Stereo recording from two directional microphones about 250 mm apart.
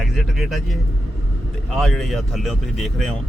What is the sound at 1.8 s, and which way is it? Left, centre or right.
Speech, centre.